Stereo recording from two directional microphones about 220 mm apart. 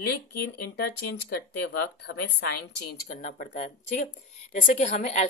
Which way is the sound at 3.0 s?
35° left (ahead or behind).